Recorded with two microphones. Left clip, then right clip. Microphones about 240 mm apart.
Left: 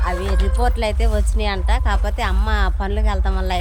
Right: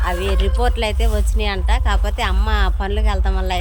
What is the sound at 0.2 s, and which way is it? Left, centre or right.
Speech, left.